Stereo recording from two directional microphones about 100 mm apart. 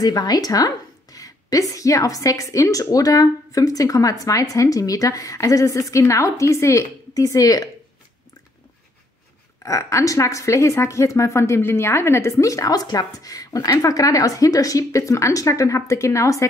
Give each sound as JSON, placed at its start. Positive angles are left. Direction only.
{"t": 0.0, "sound": "a woman's voice", "side_deg": 40}
{"t": 9.6, "sound": "a woman's voice", "side_deg": 35}